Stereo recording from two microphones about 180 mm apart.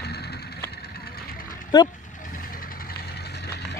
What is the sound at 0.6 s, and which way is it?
Vehicle, 60° left (ahead or behind).